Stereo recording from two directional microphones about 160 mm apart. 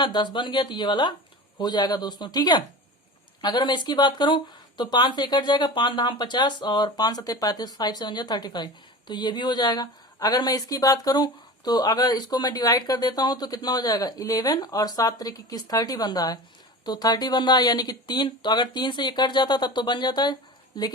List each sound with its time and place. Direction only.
0.0 s speech: 30° left (ahead or behind)